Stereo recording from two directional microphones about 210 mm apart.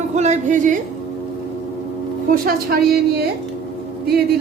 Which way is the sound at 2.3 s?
45° right (ahead or behind).